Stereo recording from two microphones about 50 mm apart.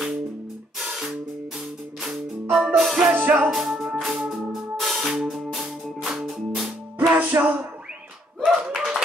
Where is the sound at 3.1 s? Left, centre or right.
Right.